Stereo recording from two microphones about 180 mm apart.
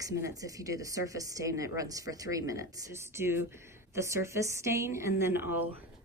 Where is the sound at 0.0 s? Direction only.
20° right (ahead or behind).